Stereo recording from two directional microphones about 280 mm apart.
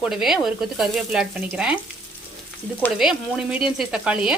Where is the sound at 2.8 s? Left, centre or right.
Centre.